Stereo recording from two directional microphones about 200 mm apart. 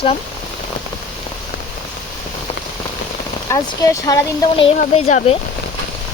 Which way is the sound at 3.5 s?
15° left (ahead or behind).